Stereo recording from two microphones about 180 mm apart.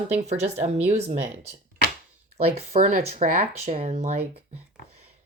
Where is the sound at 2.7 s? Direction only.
50° right (ahead or behind).